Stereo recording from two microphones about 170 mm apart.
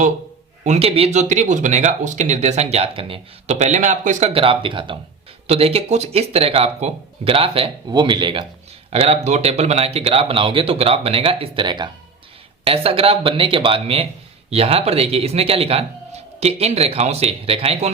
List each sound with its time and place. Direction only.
0.6 s speech: 40° right (ahead or behind)